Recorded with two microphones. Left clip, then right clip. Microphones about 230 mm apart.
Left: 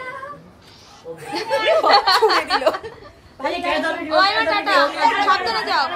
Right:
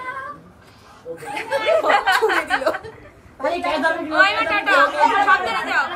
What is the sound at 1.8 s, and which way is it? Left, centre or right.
Speech, left.